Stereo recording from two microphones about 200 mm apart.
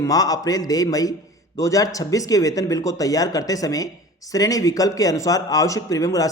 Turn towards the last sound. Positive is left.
turn(degrees=15)  # may be behind; listen again after turning